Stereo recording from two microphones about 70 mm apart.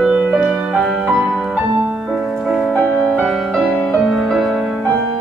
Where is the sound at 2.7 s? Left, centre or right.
Left.